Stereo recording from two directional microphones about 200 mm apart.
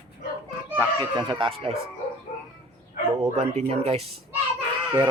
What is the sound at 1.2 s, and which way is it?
Speech, 25° right (ahead or behind).